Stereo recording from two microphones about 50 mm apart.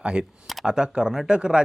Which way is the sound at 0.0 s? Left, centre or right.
Centre.